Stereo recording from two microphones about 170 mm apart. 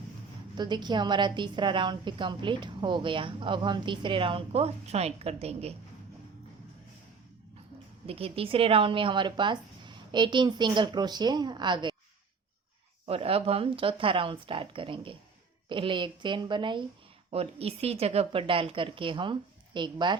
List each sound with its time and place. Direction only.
0.5 s a woman's voice: 25° right (ahead or behind)
8.0 s a woman's voice: 35° right (ahead or behind)
13.1 s a woman's voice: 35° right (ahead or behind)